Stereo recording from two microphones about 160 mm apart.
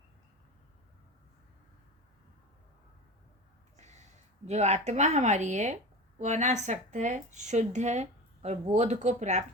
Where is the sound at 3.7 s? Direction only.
45° right (ahead or behind).